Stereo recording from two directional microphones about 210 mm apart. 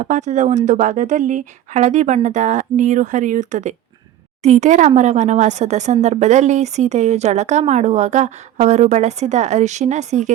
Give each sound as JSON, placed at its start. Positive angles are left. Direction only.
{"t": 0.0, "sound": "speech", "side_deg": -35}